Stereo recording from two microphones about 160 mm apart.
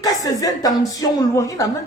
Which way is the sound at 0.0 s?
25° left (ahead or behind).